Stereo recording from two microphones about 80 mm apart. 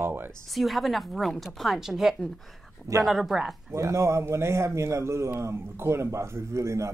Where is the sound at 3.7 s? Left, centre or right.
Right.